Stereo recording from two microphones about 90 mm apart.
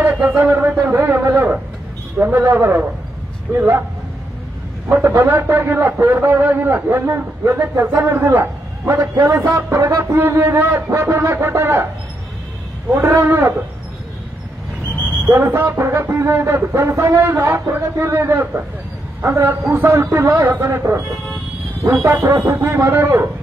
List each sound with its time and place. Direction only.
0.0 s a sound: 20° right (ahead or behind)
2.1 s speech: 20° right (ahead or behind)
4.8 s a man's voice: 20° right (ahead or behind)
12.9 s speech: 30° right (ahead or behind)
15.2 s speech: 25° right (ahead or behind)